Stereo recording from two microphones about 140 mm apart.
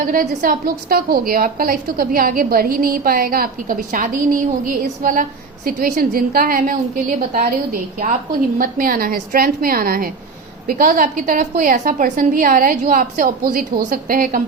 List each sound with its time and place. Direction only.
0.1 s a woman's voice: 85° right
5.6 s a woman's voice: 90° right